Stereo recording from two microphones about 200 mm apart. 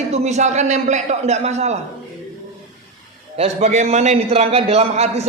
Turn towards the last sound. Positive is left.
turn(degrees=-30)  # may be behind; listen again after turning